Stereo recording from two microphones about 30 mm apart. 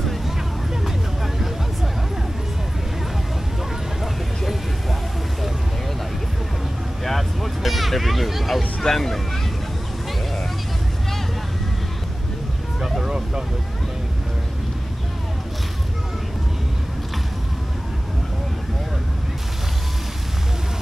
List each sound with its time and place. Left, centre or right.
0.8 s vehicle: centre
4.0 s vehicle: centre
7.1 s vehicle: centre
8.8 s speech: centre
13.0 s vehicle: right